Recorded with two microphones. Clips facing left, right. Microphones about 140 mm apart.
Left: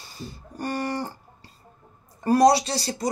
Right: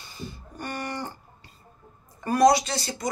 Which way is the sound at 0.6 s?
35° left (ahead or behind).